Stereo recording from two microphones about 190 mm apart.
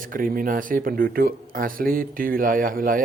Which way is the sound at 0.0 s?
45° right (ahead or behind).